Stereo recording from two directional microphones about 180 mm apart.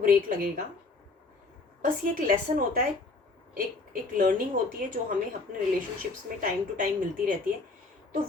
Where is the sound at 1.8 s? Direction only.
50° right (ahead or behind).